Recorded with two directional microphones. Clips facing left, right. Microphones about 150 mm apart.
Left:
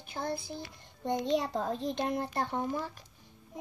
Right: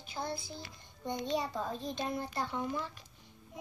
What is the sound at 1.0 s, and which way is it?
A child's voice, 90° left.